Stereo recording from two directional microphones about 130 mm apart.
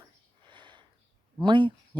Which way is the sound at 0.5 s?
40° right (ahead or behind).